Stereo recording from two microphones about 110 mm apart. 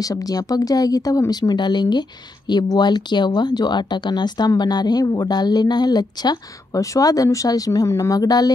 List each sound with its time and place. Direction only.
0.0 s speech: 35° left (ahead or behind)